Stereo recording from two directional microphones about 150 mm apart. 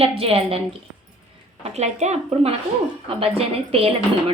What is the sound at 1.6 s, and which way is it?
A woman's voice, 45° right (ahead or behind).